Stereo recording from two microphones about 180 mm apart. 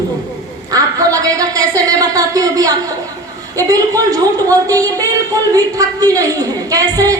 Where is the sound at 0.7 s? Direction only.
20° right (ahead or behind).